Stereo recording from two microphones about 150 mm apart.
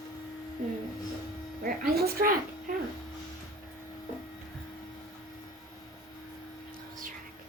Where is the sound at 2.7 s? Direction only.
65° right (ahead or behind).